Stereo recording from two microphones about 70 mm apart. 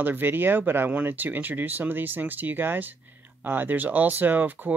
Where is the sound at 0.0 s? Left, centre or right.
Right.